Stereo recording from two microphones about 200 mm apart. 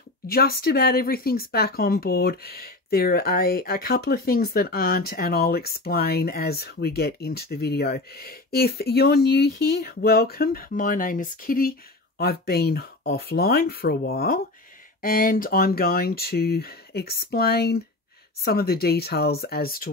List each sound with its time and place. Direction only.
0.3 s speech: 50° left (ahead or behind)